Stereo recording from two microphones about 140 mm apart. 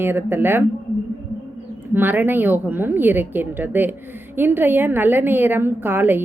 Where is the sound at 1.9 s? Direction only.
15° right (ahead or behind).